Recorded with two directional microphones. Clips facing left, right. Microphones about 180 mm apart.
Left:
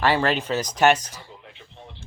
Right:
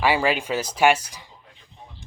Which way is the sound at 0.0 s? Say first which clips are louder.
Even; 10° right (ahead or behind).